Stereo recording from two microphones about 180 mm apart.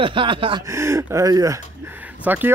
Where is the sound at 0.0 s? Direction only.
30° right (ahead or behind).